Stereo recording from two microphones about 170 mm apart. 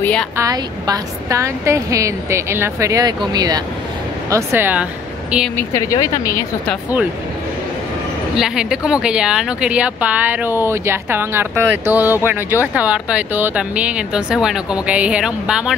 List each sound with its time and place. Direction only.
0.0 s a woman's voice: 5° left (ahead or behind)
0.4 s a woman's voice: 20° right (ahead or behind)
5.6 s speech: 20° left (ahead or behind)
8.4 s a woman's voice: 5° right (ahead or behind)